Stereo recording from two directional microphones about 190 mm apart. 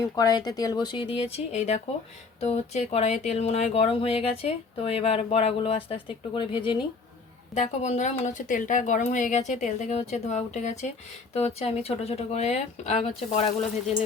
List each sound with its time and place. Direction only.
0.2 s speech: 20° left (ahead or behind)
7.5 s speech: 35° left (ahead or behind)